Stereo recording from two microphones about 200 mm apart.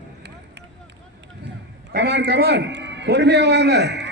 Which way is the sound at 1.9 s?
55° right (ahead or behind).